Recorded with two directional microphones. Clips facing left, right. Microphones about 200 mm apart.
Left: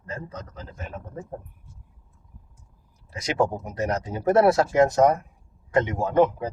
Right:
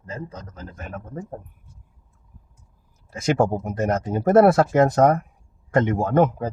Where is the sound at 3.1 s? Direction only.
50° right (ahead or behind).